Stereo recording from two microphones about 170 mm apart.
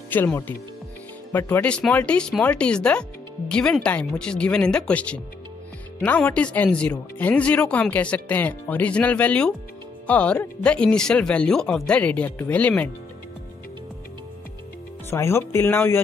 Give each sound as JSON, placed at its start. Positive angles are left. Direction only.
{"t": 0.1, "sound": "speech", "side_deg": 10}
{"t": 15.0, "sound": "speech", "side_deg": 15}